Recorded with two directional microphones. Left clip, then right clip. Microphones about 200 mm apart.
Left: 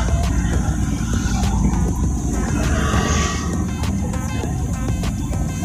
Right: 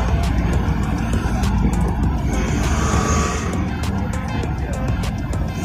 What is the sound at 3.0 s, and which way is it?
Music, 50° right (ahead or behind).